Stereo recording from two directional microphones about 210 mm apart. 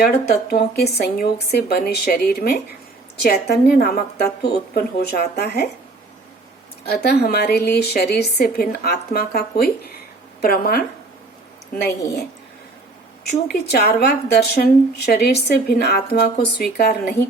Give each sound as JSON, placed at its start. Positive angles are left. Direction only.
{"t": 0.0, "sound": "a woman's voice", "side_deg": 45}
{"t": 6.8, "sound": "a woman's voice", "side_deg": 50}
{"t": 13.5, "sound": "a woman's voice", "side_deg": 50}